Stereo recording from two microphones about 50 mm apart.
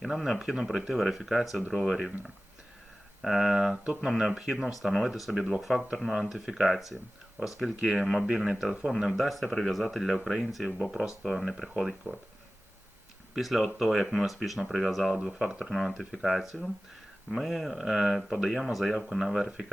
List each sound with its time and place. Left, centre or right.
0.0 s speech: centre
3.2 s speech: centre
8.2 s speech: centre
9.0 s speech: centre
12.1 s speech: right
13.3 s speech: centre
15.7 s speech: centre